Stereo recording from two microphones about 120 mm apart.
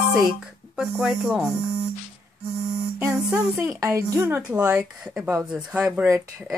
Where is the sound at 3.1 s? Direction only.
15° right (ahead or behind).